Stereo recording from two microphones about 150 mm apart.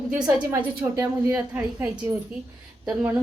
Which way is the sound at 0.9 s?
10° right (ahead or behind).